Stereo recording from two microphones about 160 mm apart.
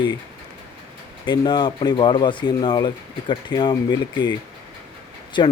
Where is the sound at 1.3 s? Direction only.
30° left (ahead or behind).